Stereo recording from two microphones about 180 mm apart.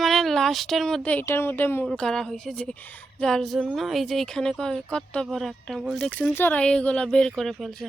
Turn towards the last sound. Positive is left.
turn(degrees=0)  # may be behind; listen again after turning